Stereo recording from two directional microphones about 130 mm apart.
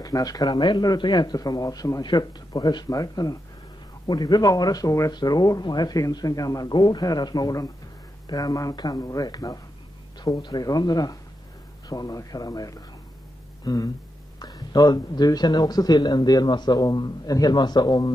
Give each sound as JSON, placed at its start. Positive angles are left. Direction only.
{"t": 0.0, "sound": "a man's voice", "side_deg": 30}